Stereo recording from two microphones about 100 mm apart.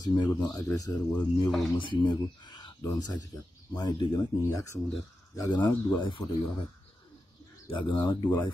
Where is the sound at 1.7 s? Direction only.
55° left (ahead or behind).